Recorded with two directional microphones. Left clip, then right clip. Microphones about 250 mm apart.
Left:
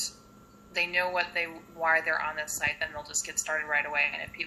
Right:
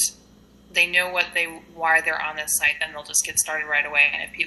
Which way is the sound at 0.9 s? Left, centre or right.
Right.